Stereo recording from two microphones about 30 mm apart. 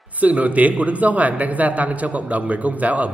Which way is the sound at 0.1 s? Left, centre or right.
Right.